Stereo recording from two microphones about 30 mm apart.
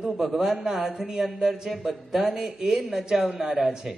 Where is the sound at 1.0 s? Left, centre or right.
Centre.